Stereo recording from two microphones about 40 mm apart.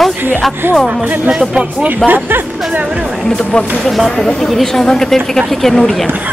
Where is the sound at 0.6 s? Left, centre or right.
Right.